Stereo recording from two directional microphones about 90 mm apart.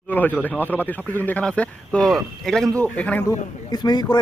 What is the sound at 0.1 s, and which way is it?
Speech, 20° left (ahead or behind).